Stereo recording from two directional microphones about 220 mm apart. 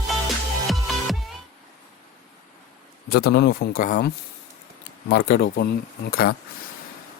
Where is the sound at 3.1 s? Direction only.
45° left (ahead or behind).